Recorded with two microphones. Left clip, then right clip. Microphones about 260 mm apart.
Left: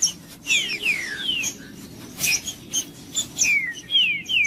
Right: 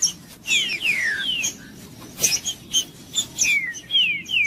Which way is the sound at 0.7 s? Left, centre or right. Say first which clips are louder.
Right 3 dB; right.